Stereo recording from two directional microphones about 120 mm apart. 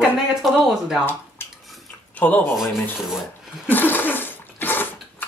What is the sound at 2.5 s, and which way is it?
Speech, 5° right (ahead or behind).